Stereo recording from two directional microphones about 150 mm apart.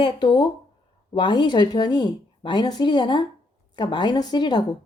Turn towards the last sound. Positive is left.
turn(degrees=30)  # may be behind; listen again after turning